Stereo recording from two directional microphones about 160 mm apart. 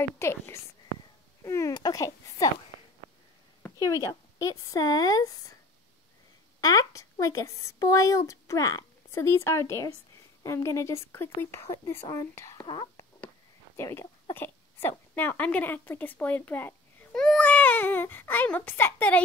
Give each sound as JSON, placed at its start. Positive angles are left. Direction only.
{"t": 0.2, "sound": "speech", "side_deg": 15}
{"t": 3.8, "sound": "speech", "side_deg": 20}
{"t": 6.6, "sound": "speech", "side_deg": 20}